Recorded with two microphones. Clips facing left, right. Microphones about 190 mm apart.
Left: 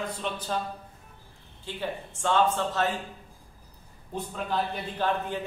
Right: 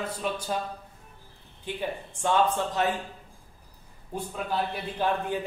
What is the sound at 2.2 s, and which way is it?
Speech, 15° right (ahead or behind).